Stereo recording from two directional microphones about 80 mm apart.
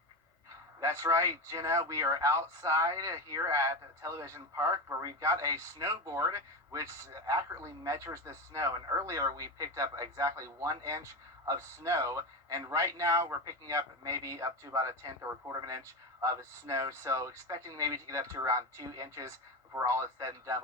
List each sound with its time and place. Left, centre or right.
0.8 s speech: right